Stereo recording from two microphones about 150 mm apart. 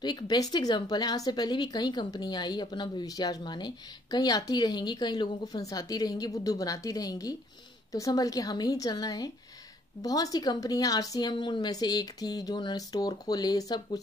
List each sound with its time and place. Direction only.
0.0 s speech: 25° left (ahead or behind)